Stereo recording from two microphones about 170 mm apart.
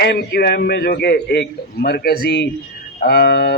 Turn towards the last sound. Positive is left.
turn(degrees=70)  # may be behind; listen again after turning